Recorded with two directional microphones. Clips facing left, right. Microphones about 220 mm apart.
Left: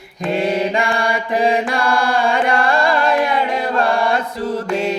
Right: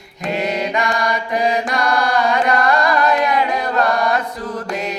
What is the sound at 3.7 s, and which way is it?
Chant, 30° left (ahead or behind).